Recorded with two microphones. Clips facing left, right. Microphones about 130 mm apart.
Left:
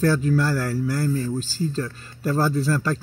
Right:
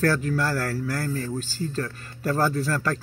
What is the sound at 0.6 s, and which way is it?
Speech, 25° left (ahead or behind).